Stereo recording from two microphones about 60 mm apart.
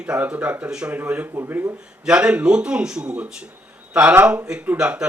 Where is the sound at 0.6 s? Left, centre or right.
Centre.